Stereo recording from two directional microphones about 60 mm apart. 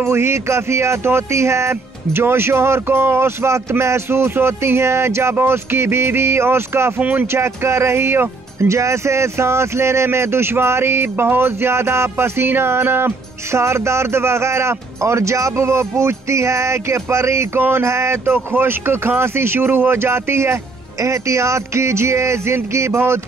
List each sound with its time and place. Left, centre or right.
0.0 s speech: right
7.0 s speech: right
7.2 s speech: right
18.3 s speech: right